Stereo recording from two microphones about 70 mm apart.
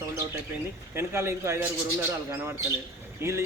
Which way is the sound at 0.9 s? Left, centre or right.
Right.